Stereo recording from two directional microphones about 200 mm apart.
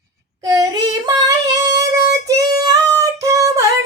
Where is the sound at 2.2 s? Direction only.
15° right (ahead or behind).